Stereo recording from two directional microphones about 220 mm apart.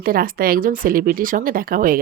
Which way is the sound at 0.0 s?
40° right (ahead or behind).